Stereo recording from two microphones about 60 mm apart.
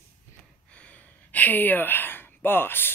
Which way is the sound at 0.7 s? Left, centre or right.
Left.